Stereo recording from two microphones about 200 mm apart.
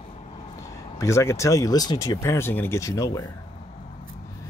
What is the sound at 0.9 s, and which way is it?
Speech, 15° left (ahead or behind).